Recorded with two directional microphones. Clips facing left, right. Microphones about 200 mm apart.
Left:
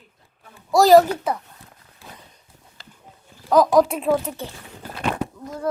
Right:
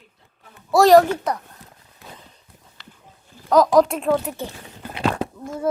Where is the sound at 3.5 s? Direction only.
Centre (ahead or behind).